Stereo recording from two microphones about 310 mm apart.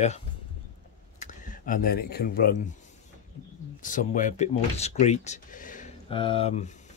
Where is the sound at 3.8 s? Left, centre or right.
Left.